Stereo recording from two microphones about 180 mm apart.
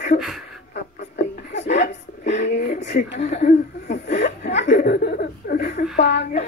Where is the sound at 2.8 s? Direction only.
40° left (ahead or behind).